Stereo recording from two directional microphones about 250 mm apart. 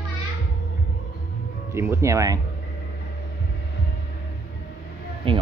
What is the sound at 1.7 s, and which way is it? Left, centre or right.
Speech, centre.